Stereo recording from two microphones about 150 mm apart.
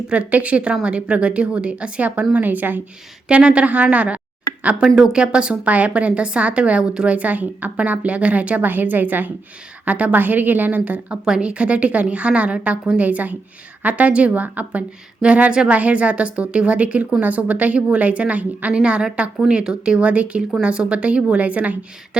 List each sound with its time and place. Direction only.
0.1 s a woman's voice: 10° right (ahead or behind)